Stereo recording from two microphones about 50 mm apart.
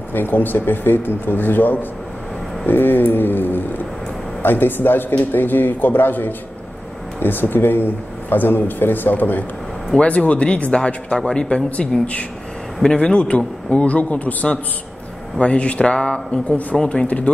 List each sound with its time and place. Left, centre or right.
0.1 s speech: left
9.9 s speech: left
12.9 s speech: centre